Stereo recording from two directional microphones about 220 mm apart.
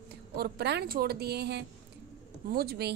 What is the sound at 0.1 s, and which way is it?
Speech, 45° right (ahead or behind).